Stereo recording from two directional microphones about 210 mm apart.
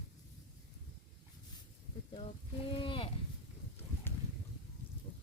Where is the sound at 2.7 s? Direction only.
25° left (ahead or behind).